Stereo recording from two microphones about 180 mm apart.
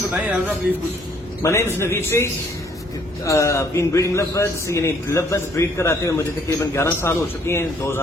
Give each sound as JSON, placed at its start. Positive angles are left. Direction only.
{"t": 0.1, "sound": "a man's voice", "side_deg": -5}
{"t": 1.4, "sound": "a man's voice", "side_deg": 15}